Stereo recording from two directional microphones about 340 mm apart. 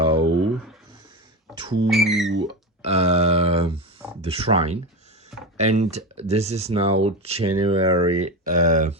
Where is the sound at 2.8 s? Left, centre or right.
Centre.